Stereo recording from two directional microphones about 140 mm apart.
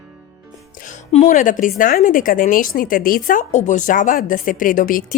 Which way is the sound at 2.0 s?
75° left (ahead or behind).